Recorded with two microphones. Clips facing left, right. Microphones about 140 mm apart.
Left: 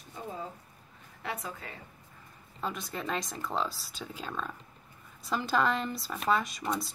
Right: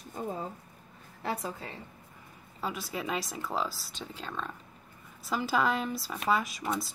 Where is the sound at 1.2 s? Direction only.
30° right (ahead or behind).